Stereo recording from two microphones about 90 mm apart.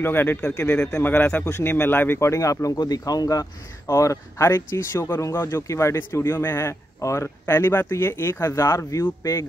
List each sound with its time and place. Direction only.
0.0 s speech: 25° left (ahead or behind)